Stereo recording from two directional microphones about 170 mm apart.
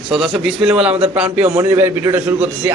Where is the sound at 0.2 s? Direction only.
5° right (ahead or behind).